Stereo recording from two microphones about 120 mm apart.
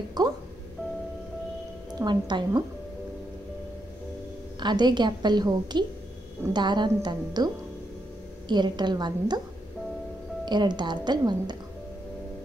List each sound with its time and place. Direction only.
0.2 s a woman's voice: 35° right (ahead or behind)
2.0 s a woman's voice: 40° right (ahead or behind)
4.6 s a woman's voice: 35° right (ahead or behind)
10.4 s a woman's voice: 40° right (ahead or behind)